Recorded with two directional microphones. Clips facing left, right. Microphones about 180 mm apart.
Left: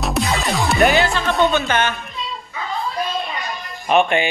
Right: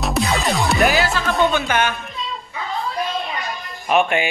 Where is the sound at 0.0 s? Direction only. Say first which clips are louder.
Right 1 dB; centre (ahead or behind).